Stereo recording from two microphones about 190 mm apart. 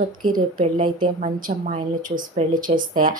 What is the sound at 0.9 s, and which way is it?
A woman's voice, 40° right (ahead or behind).